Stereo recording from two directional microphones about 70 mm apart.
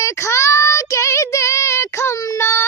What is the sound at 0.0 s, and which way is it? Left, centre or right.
Child singing, left.